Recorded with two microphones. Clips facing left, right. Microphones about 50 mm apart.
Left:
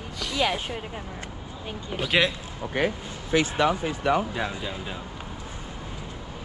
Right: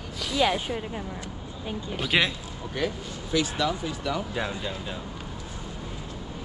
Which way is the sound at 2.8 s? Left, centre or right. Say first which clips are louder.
Left 3 dB; left.